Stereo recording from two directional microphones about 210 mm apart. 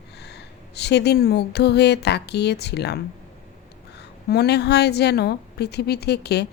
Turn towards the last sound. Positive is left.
turn(degrees=50)  # may be behind; listen again after turning